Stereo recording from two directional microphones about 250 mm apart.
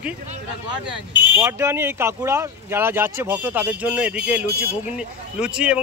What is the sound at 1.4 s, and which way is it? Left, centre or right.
Speech, centre.